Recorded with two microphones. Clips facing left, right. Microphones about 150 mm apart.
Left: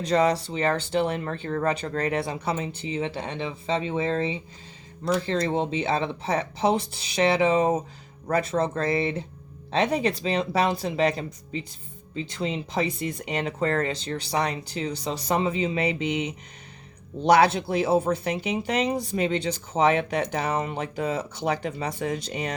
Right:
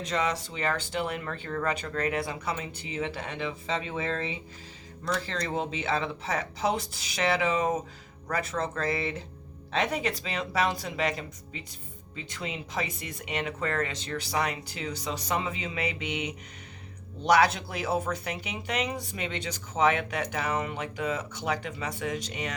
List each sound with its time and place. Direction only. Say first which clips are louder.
0.0 s speech: left 8 dB; 35° left (ahead or behind)